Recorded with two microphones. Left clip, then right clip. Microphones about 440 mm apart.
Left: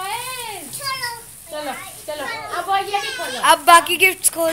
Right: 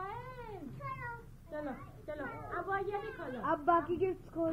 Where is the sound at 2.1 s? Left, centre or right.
Centre.